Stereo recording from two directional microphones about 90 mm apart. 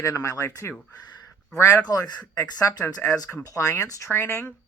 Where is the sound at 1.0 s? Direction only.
50° left (ahead or behind).